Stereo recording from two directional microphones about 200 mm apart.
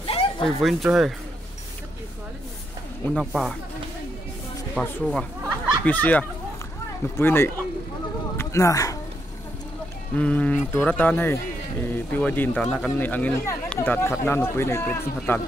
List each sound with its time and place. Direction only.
0.0 s a sound: 25° left (ahead or behind)
0.6 s cowbell: centre (ahead or behind)
3.1 s cowbell: centre (ahead or behind)
4.8 s cowbell: 5° left (ahead or behind)
5.9 s speech: 10° left (ahead or behind)
10.1 s speech: 5° left (ahead or behind)